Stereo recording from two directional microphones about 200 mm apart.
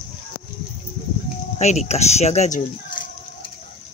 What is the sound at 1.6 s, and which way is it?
Speech, 35° left (ahead or behind).